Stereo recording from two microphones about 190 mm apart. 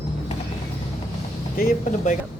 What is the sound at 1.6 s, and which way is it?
Speech, 45° left (ahead or behind).